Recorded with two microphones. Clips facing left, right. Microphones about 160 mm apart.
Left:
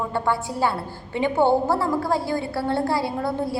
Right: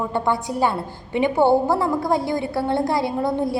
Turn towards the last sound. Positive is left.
turn(degrees=-20)  # may be behind; listen again after turning